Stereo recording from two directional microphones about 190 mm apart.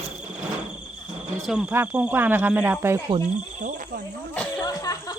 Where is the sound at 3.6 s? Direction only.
45° right (ahead or behind).